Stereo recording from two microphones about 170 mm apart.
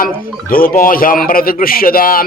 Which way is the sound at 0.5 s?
55° left (ahead or behind).